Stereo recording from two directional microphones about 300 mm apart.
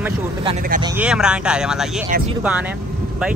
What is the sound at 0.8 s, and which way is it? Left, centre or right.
A man's voice, centre.